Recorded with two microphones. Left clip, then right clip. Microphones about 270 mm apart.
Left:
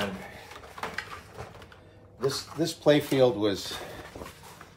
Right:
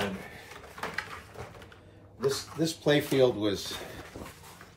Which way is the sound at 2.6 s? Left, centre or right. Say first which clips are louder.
Left 4 dB; left.